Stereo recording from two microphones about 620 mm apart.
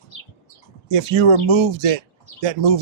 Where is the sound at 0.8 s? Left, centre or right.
Right.